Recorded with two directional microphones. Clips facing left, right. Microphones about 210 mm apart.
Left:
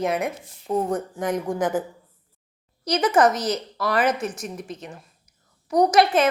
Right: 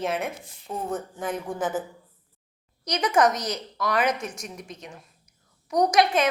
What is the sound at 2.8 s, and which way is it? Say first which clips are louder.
A woman's voice: left 3 dB; 5° left (ahead or behind).